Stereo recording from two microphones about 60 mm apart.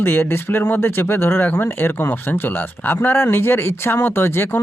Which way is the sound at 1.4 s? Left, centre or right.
Left.